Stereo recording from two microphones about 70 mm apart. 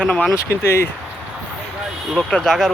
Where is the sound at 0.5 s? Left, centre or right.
Left.